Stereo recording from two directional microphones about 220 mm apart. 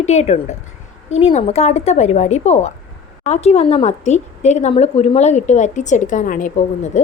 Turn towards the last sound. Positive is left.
turn(degrees=35)  # may be behind; listen again after turning